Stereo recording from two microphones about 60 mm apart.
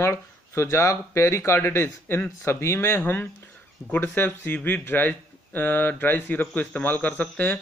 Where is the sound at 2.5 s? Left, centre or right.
Left.